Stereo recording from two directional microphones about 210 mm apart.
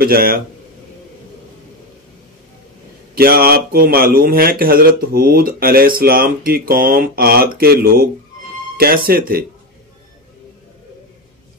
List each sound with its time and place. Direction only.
0.0 s speech: 45° right (ahead or behind)
3.2 s speech: 45° right (ahead or behind)